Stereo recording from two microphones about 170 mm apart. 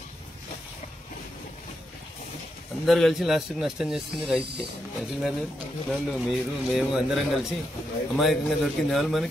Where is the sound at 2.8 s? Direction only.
Centre (ahead or behind).